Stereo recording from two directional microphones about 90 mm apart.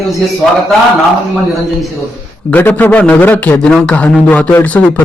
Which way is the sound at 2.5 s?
20° left (ahead or behind).